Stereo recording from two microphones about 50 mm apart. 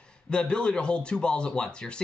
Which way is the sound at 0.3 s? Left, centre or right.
Centre.